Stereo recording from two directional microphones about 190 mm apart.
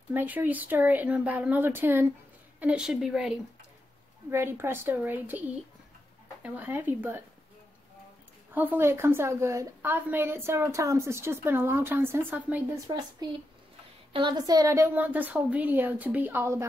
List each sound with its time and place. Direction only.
0.1 s a woman's voice: 10° right (ahead or behind)
6.4 s a woman's voice: 10° right (ahead or behind)
8.5 s a woman's voice: 10° right (ahead or behind)
13.2 s a woman's voice: 20° right (ahead or behind)